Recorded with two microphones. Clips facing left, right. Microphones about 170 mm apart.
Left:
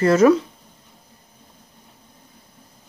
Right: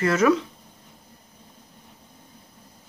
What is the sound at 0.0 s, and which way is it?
Speech, 35° left (ahead or behind).